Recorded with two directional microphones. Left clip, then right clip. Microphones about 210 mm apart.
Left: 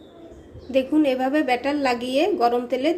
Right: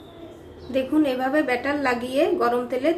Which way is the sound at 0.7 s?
25° left (ahead or behind).